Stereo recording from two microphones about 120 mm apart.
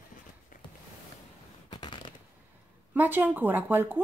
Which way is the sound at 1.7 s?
45° left (ahead or behind).